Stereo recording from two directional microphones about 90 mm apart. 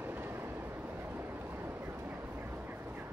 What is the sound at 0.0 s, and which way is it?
Vehicle, 25° right (ahead or behind).